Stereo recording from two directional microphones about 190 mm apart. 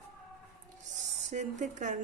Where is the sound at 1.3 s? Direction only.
40° right (ahead or behind).